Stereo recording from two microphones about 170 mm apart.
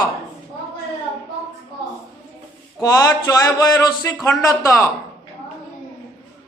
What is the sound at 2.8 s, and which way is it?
A man's voice, 20° left (ahead or behind).